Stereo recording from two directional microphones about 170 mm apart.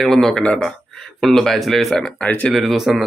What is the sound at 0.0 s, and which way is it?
Speech, centre (ahead or behind).